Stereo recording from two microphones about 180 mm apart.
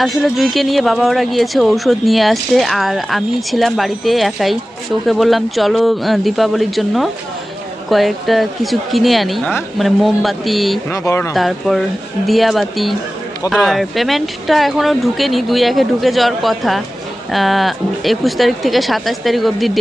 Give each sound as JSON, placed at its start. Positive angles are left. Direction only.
{"t": 0.0, "sound": "speech", "side_deg": 0}
{"t": 10.9, "sound": "speech", "side_deg": 15}
{"t": 11.3, "sound": "speech", "side_deg": 0}